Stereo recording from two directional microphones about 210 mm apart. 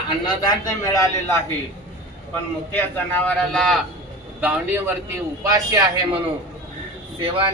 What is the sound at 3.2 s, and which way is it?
A man's voice, 5° left (ahead or behind).